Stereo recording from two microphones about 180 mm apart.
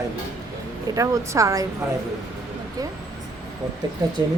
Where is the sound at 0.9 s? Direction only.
20° right (ahead or behind).